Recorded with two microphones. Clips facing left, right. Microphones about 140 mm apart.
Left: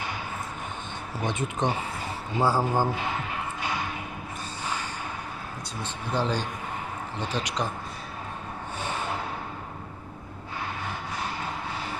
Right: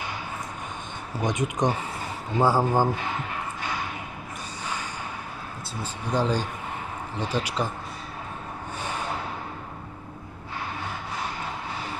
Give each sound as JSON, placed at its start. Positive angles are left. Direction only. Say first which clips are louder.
{"t": 1.2, "sound": "speech", "louder": "right 3 dB", "side_deg": -15}
{"t": 5.8, "sound": "speech", "louder": "right 2 dB", "side_deg": -10}